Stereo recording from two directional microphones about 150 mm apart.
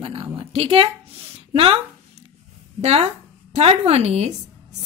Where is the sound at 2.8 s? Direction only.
45° right (ahead or behind).